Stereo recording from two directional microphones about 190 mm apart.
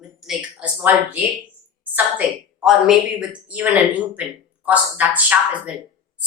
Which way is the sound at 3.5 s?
5° right (ahead or behind).